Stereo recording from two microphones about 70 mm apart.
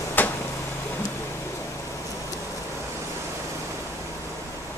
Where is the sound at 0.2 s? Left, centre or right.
Left.